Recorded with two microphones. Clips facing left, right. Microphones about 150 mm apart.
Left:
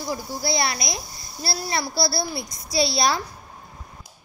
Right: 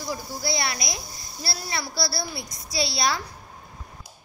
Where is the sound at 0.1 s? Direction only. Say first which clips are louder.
Left 3 dB; 30° left (ahead or behind).